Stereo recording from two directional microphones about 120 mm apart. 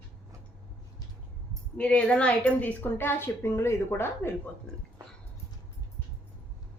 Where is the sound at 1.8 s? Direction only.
10° left (ahead or behind).